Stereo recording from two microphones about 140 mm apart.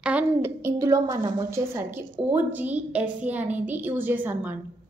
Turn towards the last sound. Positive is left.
turn(degrees=-10)  # may be behind; listen again after turning